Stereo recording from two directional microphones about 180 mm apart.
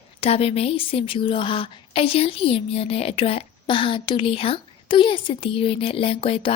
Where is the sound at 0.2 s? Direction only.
35° left (ahead or behind).